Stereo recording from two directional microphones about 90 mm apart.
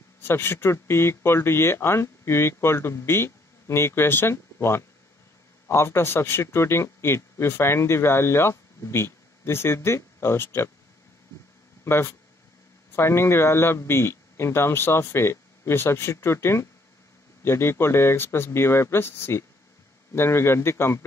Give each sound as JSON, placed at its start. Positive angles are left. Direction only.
{"t": 0.2, "sound": "speech", "side_deg": 25}
{"t": 11.8, "sound": "speech", "side_deg": 30}